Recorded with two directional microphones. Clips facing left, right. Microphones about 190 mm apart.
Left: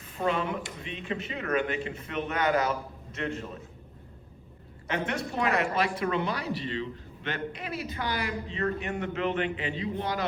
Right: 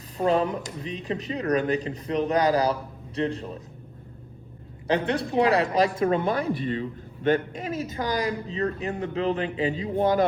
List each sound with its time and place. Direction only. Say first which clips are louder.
0.2 s speech: right 6 dB; 35° right (ahead or behind)
4.9 s speech: right 7 dB; 35° right (ahead or behind)